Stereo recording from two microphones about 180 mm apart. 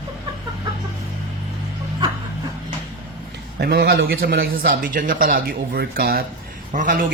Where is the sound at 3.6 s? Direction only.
65° right (ahead or behind).